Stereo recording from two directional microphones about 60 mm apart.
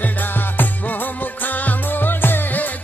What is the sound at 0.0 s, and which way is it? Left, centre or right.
Music, left.